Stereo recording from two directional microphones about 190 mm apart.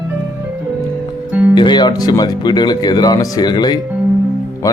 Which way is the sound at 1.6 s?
25° left (ahead or behind).